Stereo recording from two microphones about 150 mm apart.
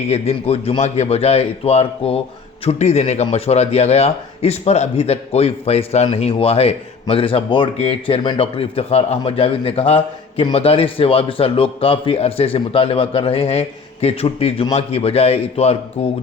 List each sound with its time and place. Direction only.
0.1 s a man's voice: 45° left (ahead or behind)